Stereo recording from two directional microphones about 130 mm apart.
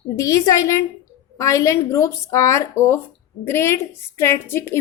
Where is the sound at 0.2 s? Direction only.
25° left (ahead or behind).